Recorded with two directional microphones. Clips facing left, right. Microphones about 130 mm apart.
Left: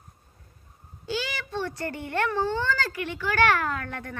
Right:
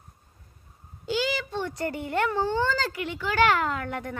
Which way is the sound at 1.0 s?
20° right (ahead or behind).